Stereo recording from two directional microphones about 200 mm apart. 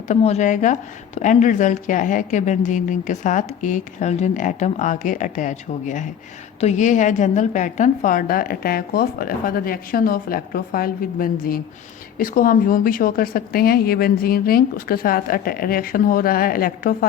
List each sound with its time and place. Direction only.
0.1 s a woman's voice: 35° left (ahead or behind)